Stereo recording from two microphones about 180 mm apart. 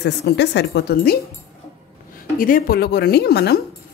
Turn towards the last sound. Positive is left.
turn(degrees=60)  # may be behind; listen again after turning